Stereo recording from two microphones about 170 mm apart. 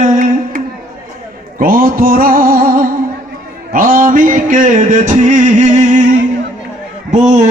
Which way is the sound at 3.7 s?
55° right (ahead or behind).